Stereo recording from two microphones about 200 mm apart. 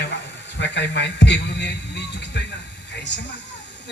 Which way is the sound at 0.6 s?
60° left (ahead or behind).